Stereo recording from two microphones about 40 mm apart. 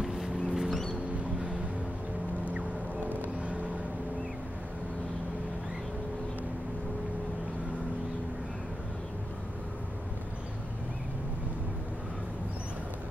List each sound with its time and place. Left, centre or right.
0.0 s vehicle: centre
3.3 s vehicle: right